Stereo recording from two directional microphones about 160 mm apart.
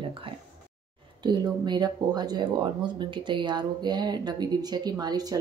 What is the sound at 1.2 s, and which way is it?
Speech, 25° right (ahead or behind).